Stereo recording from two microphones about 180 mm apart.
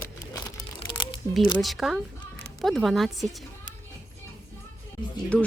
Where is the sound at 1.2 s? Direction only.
15° left (ahead or behind).